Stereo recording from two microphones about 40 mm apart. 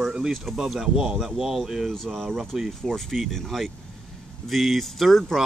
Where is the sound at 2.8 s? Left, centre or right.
Centre.